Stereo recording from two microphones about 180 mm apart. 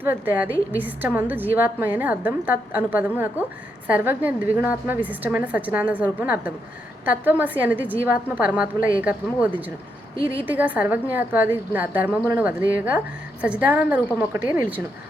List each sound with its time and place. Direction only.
0.0 s a woman's voice: 10° right (ahead or behind)